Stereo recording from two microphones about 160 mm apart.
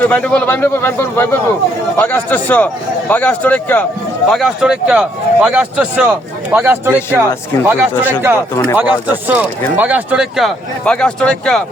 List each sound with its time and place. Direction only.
0.0 s a man's voice: 10° left (ahead or behind)